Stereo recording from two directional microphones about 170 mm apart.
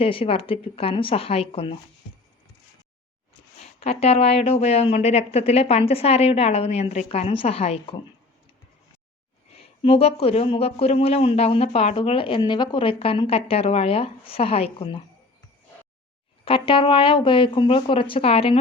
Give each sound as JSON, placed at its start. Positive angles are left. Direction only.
{"t": 0.0, "sound": "speech", "side_deg": 35}
{"t": 3.6, "sound": "speech", "side_deg": 40}
{"t": 9.6, "sound": "speech", "side_deg": 35}
{"t": 16.4, "sound": "speech", "side_deg": 30}